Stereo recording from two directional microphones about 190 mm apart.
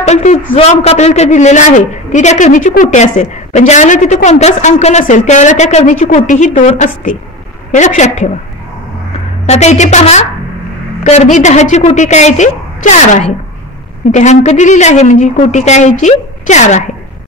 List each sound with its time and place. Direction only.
0.0 s a man's voice: 35° left (ahead or behind)
9.5 s a man's voice: 35° left (ahead or behind)
11.3 s a man's voice: 40° left (ahead or behind)